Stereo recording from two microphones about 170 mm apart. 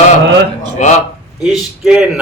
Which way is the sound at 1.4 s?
5° right (ahead or behind).